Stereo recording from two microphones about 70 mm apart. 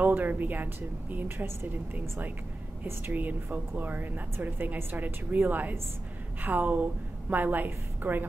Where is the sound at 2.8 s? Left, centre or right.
Right.